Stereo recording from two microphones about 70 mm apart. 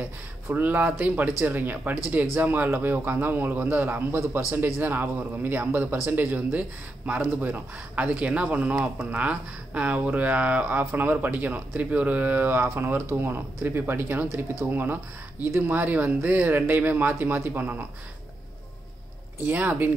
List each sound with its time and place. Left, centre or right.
0.0 s speech: right
19.4 s speech: right